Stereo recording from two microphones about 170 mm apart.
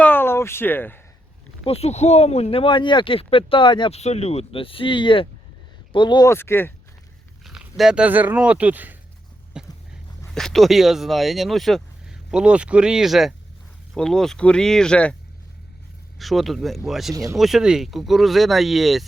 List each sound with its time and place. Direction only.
0.0 s a sound: 10° left (ahead or behind)
1.6 s speech: 35° left (ahead or behind); by 6.7 s 15° left (ahead or behind)
7.4 s speech: 5° right (ahead or behind)
9.5 s a sound: 5° right (ahead or behind)
10.3 s speech: centre (ahead or behind)
16.1 s speech: centre (ahead or behind)